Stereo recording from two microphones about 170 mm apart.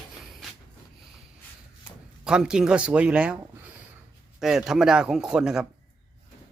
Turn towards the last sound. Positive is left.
turn(degrees=-5)  # may be behind; listen again after turning